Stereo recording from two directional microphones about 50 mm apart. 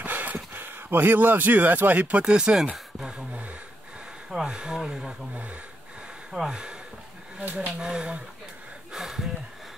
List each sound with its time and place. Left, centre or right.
0.0 s speech: right; by 2.6 s centre
4.3 s speech: centre
7.3 s speech: right
7.8 s speech: centre
8.9 s a sound: centre